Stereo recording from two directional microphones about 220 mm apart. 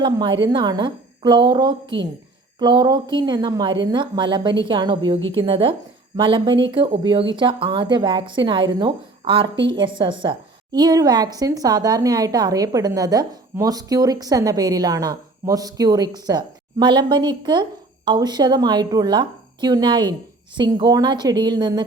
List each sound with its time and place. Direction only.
0.0 s a woman's voice: 20° right (ahead or behind)